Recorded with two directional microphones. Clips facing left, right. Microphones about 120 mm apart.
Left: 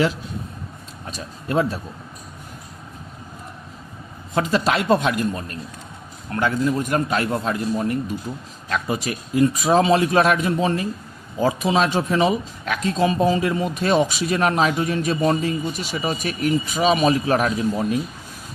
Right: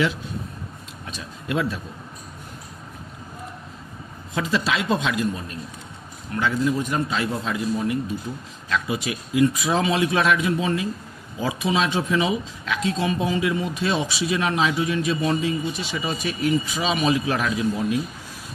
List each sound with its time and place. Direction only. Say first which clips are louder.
1.0 s speech: left 2 dB; 40° left (ahead or behind)
4.4 s a man's voice: left 4 dB; 45° left (ahead or behind)
6.3 s a man's voice: left 2 dB; 50° left (ahead or behind)